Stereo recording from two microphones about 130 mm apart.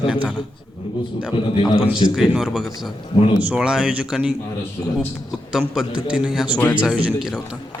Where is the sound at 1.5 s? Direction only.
35° left (ahead or behind).